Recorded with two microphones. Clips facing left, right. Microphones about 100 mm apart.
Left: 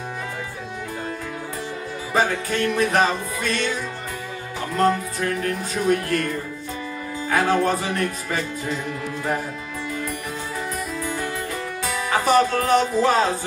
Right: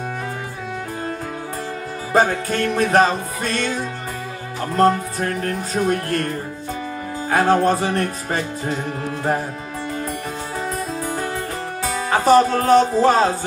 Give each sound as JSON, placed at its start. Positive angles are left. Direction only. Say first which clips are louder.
{"t": 2.1, "sound": "music", "louder": "right 4 dB", "side_deg": -40}
{"t": 11.0, "sound": "music", "louder": "right 2 dB", "side_deg": -35}
{"t": 11.8, "sound": "speech", "louder": "right 4 dB", "side_deg": -35}